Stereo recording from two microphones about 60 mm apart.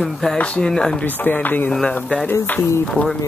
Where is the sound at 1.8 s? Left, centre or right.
Left.